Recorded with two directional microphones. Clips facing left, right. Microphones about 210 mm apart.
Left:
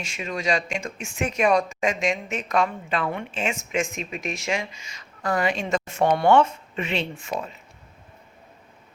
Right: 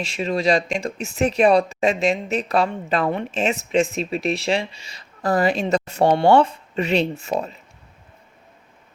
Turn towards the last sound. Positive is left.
turn(degrees=-40)  # may be behind; listen again after turning